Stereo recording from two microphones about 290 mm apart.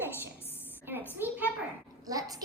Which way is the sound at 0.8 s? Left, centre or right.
Centre.